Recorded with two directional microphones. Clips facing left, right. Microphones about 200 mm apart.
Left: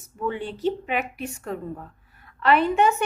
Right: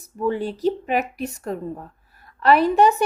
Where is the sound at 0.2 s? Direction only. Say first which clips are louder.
Right 5 dB; 40° right (ahead or behind).